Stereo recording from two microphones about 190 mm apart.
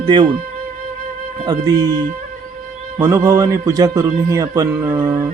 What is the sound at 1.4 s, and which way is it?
Speech, 20° right (ahead or behind).